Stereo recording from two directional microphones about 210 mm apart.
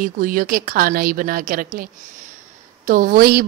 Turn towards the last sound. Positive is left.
turn(degrees=-45)  # may be behind; listen again after turning